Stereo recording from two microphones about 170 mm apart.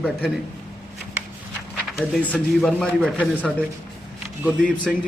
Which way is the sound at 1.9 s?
10° left (ahead or behind).